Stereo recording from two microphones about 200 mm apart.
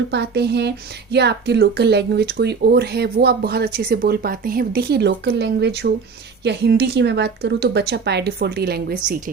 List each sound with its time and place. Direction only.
0.1 s speech: 60° right (ahead or behind)